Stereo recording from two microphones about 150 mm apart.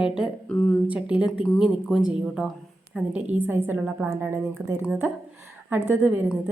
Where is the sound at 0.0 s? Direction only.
5° right (ahead or behind).